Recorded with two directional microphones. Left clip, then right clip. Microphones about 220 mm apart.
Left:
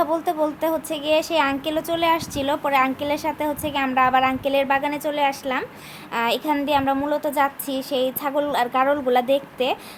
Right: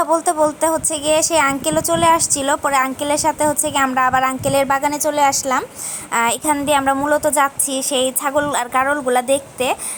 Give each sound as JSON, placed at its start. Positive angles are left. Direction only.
{"t": 0.0, "sound": "a woman's voice", "side_deg": -15}
{"t": 7.7, "sound": "a woman's voice", "side_deg": 15}
{"t": 7.9, "sound": "a woman's voice", "side_deg": -15}